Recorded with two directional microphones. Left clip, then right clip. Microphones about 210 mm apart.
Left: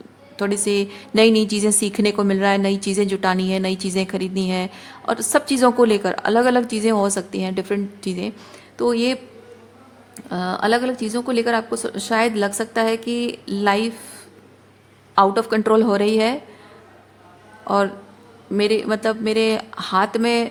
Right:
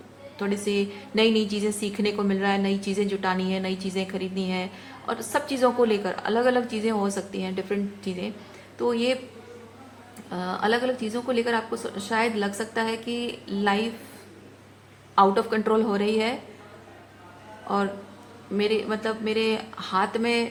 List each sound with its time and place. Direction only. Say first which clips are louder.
0.3 s a woman's voice: left 6 dB; 50° left (ahead or behind)
10.2 s a woman's voice: left 5 dB; 50° left (ahead or behind)
15.1 s a woman's voice: left 4 dB; 50° left (ahead or behind)
18.5 s a woman's voice: left 6 dB; 50° left (ahead or behind)